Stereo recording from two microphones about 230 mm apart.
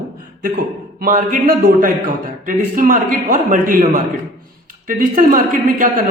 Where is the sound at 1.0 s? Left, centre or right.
Right.